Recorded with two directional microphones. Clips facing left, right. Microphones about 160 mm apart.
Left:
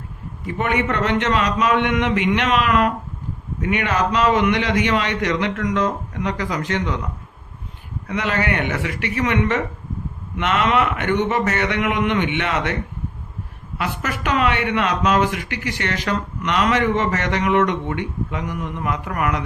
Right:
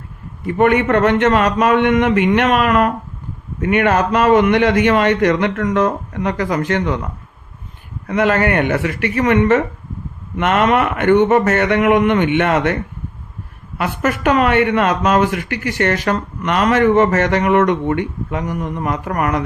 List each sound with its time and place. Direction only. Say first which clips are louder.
0.4 s speech: right 8 dB; 55° right (ahead or behind)
8.0 s speech: right 7 dB; 50° right (ahead or behind)
13.7 s speech: right 6 dB; 50° right (ahead or behind)